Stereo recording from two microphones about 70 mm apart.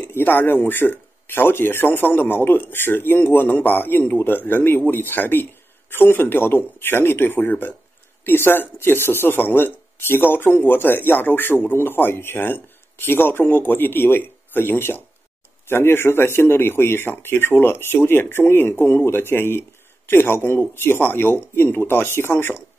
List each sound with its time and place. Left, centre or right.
0.0 s speech: left